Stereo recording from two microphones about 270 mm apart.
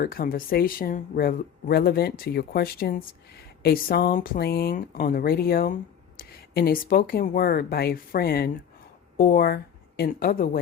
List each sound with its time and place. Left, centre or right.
0.0 s speech: left